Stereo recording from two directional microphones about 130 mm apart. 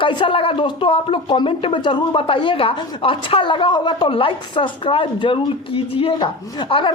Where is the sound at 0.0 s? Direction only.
40° left (ahead or behind).